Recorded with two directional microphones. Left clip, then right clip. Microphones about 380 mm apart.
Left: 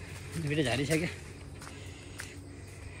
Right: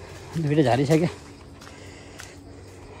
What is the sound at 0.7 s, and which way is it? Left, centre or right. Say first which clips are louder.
Speech: right 9 dB; right.